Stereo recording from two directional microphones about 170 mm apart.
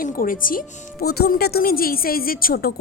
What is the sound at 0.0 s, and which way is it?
Speech, 55° left (ahead or behind).